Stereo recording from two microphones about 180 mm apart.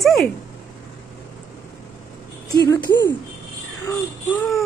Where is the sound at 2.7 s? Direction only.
20° left (ahead or behind).